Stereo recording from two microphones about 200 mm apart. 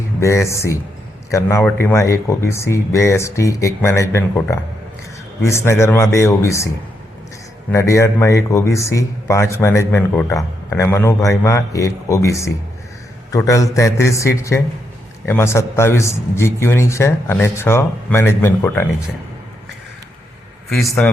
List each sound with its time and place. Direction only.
0.2 s speech: 15° left (ahead or behind)
7.7 s speech: 15° left (ahead or behind)
20.7 s a man's voice: centre (ahead or behind)